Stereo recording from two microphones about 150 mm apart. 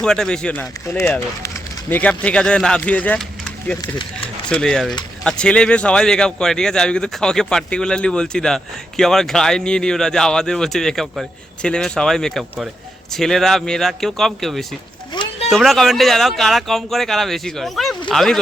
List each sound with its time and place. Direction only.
0.0 s a man's voice: 5° left (ahead or behind)
15.1 s a sound: 30° left (ahead or behind)
15.4 s a man's voice: centre (ahead or behind)